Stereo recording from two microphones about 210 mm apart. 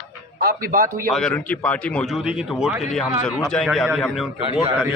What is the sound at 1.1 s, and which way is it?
A man's voice, centre (ahead or behind).